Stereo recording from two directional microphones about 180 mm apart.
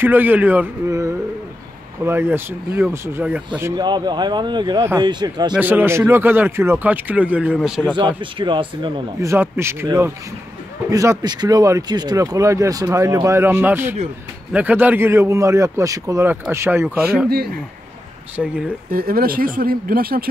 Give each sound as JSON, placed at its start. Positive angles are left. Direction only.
{"t": 0.0, "sound": "speech", "side_deg": -10}
{"t": 3.7, "sound": "speech", "side_deg": -25}
{"t": 5.6, "sound": "speech", "side_deg": -10}
{"t": 8.2, "sound": "speech", "side_deg": -30}
{"t": 9.3, "sound": "speech", "side_deg": -15}
{"t": 18.3, "sound": "speech", "side_deg": -5}
{"t": 18.9, "sound": "speech", "side_deg": -55}